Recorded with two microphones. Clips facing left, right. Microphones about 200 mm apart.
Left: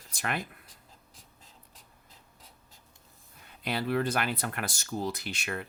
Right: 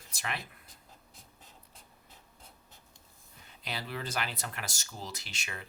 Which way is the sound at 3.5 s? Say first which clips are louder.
Left 9 dB; 55° left (ahead or behind).